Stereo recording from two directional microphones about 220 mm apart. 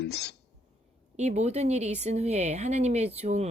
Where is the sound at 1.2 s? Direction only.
30° right (ahead or behind).